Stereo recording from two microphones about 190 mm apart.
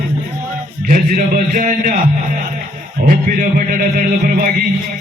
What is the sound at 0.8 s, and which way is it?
A man's voice, 45° right (ahead or behind).